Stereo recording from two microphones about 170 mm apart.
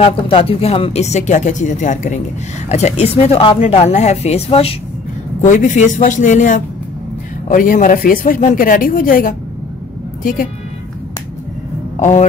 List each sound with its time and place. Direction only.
0.0 s speech: 35° left (ahead or behind)
5.4 s speech: 50° left (ahead or behind)
12.0 s a sound: 45° left (ahead or behind)